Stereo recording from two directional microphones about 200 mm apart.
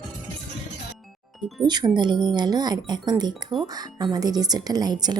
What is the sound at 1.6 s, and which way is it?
A woman's voice, 20° right (ahead or behind).